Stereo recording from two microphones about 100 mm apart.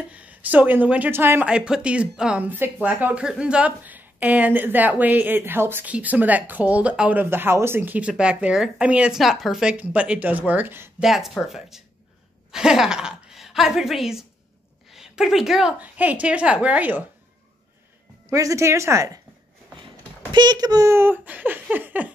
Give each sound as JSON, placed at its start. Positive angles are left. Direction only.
{"t": 0.1, "sound": "speech", "side_deg": -15}
{"t": 1.4, "sound": "a woman's voice", "side_deg": -10}
{"t": 11.0, "sound": "a woman's voice", "side_deg": -5}
{"t": 15.8, "sound": "a woman's voice", "side_deg": -15}
{"t": 18.3, "sound": "speech", "side_deg": -35}
{"t": 20.3, "sound": "a child's voice", "side_deg": -45}
{"t": 20.9, "sound": "laughter", "side_deg": -20}